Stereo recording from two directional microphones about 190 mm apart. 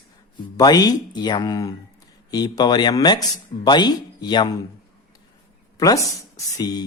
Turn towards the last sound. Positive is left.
turn(degrees=20)  # may be behind; listen again after turning